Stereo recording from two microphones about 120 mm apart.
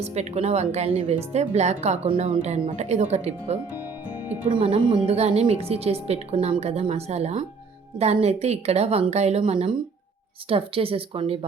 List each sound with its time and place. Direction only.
0.0 s a woman's voice: 60° right (ahead or behind)
2.4 s a woman's voice: 80° right; by 3.6 s 65° right (ahead or behind)
4.5 s speech: 45° right (ahead or behind)
5.0 s a woman's voice: 60° right (ahead or behind)